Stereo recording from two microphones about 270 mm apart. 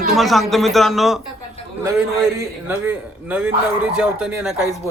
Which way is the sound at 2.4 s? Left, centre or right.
Centre.